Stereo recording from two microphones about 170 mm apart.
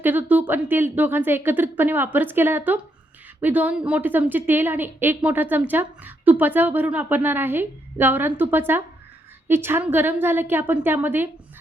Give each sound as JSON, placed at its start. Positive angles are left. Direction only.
{"t": 0.0, "sound": "a woman's voice", "side_deg": -10}